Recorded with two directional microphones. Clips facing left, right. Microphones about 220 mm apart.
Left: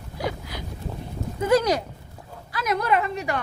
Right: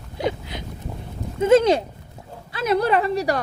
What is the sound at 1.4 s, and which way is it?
Speech, 25° right (ahead or behind).